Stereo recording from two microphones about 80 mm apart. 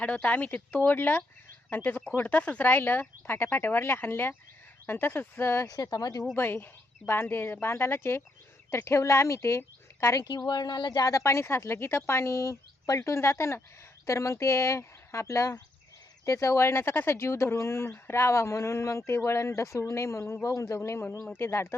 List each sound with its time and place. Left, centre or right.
0.0 s speech: centre
5.6 s speech: left
6.3 s speech: left
10.2 s speech: left
11.1 s speech: left